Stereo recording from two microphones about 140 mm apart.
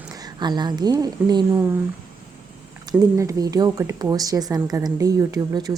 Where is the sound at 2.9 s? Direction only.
20° right (ahead or behind).